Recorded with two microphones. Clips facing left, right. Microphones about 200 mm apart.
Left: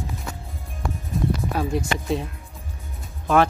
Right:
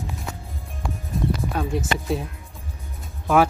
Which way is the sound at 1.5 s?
Centre (ahead or behind).